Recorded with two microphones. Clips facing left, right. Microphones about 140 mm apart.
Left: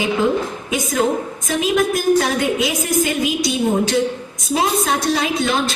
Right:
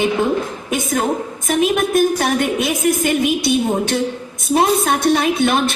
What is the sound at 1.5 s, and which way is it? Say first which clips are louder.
A woman's voice: right 2 dB; 55° right (ahead or behind).